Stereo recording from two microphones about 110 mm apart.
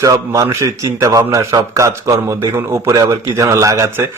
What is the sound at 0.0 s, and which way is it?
A man's voice, 30° right (ahead or behind).